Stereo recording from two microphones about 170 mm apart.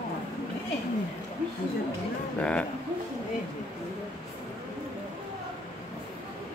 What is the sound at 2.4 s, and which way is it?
Speech, 5° left (ahead or behind).